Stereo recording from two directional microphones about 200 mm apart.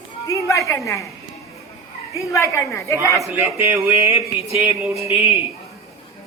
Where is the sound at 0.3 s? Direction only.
15° left (ahead or behind).